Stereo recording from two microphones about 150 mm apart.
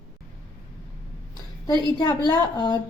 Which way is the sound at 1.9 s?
25° left (ahead or behind).